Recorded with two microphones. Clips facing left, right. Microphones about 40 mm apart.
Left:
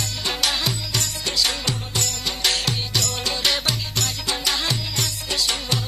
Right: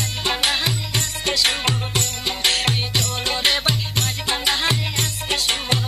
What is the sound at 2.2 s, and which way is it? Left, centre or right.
Music, right.